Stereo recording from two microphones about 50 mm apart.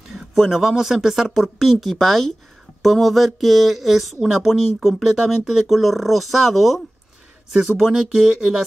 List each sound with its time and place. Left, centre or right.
0.1 s speech: centre